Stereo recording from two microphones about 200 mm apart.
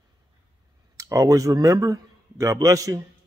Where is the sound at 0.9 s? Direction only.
15° right (ahead or behind).